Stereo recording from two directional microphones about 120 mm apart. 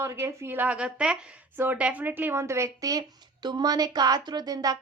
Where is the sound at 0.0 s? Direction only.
25° right (ahead or behind).